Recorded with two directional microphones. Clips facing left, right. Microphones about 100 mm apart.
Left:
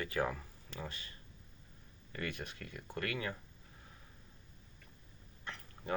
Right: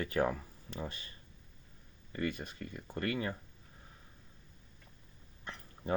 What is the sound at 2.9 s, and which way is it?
Speech, 30° right (ahead or behind).